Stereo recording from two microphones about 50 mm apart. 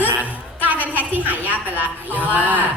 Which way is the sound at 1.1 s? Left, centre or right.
Right.